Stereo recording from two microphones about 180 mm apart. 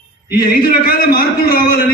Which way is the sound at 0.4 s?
55° left (ahead or behind).